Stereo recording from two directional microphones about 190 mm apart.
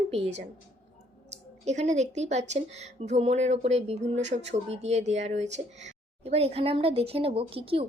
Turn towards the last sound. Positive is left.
turn(degrees=-30)  # may be behind; listen again after turning